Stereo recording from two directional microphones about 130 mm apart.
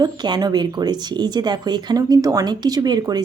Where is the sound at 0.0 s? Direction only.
35° right (ahead or behind).